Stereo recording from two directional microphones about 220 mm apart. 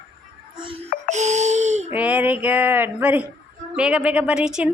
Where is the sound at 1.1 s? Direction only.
30° right (ahead or behind).